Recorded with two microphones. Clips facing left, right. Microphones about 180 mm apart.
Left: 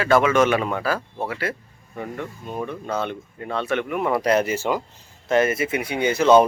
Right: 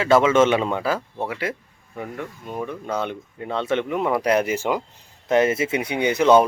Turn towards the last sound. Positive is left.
turn(degrees=-15)  # may be behind; listen again after turning